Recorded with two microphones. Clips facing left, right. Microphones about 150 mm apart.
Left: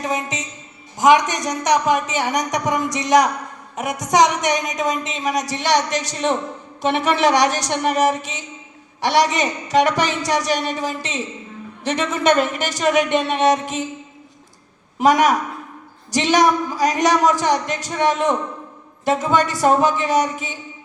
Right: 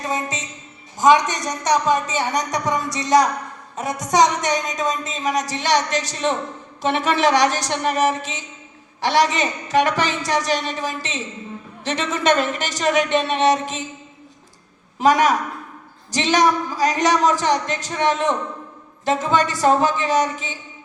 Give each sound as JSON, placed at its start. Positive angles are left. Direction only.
{"t": 0.0, "sound": "music", "side_deg": 15}
{"t": 0.9, "sound": "speech", "side_deg": 15}
{"t": 14.9, "sound": "a woman's voice", "side_deg": 15}